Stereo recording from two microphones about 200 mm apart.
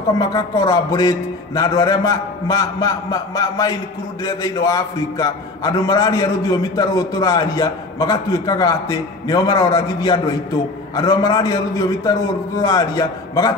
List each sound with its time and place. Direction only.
0.2 s a man's voice: 20° left (ahead or behind)